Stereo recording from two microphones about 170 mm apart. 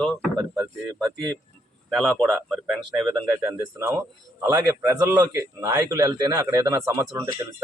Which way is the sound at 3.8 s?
15° right (ahead or behind).